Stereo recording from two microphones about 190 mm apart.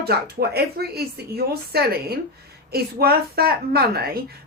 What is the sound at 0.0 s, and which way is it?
A woman's voice, 55° right (ahead or behind).